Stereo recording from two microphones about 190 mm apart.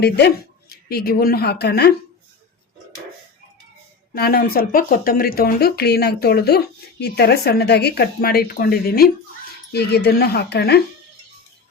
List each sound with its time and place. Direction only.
0.0 s speech: 60° left (ahead or behind)
4.1 s speech: 50° left (ahead or behind)